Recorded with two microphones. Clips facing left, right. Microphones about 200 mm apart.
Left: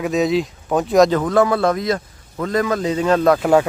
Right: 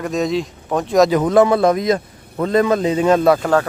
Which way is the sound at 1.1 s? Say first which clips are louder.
Right 3 dB; 15° right (ahead or behind).